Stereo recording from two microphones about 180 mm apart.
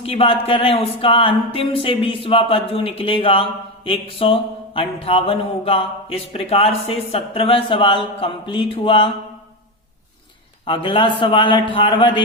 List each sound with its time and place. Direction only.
0.0 s speech: 30° left (ahead or behind)
10.7 s speech: 30° left (ahead or behind)